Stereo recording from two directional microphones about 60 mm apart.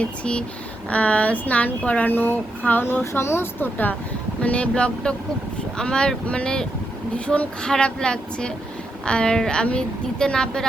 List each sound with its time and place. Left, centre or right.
0.0 s a woman's voice: centre
2.0 s a sound: left
3.0 s speech: left
4.4 s a woman's voice: left